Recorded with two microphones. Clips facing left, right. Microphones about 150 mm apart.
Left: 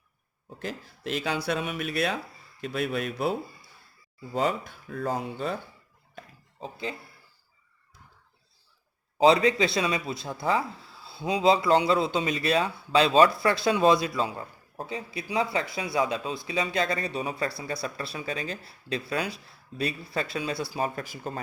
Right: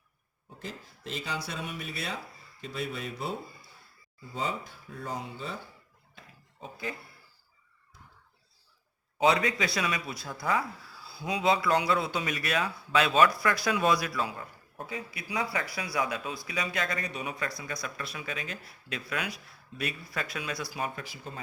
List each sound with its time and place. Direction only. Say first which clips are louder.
0.6 s speech: left 6 dB; 70° left (ahead or behind)
6.6 s speech: left 3 dB; 25° left (ahead or behind)
9.1 s speech: left 6 dB; 30° left (ahead or behind); by 21.4 s 45° left (ahead or behind)